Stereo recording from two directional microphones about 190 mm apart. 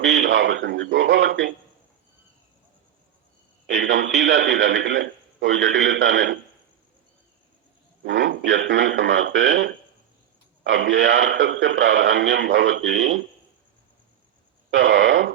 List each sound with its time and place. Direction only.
0.1 s a man's voice: 65° right (ahead or behind)
3.8 s a man's voice: 70° right (ahead or behind)
8.0 s a man's voice: 75° right (ahead or behind)
14.7 s a man's voice: 70° right (ahead or behind)